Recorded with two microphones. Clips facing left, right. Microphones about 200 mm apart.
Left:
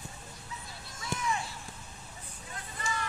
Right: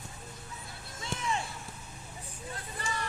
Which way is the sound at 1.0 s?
30° right (ahead or behind).